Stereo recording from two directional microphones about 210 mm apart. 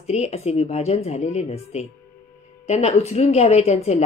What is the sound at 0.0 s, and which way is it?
Speech, 30° left (ahead or behind).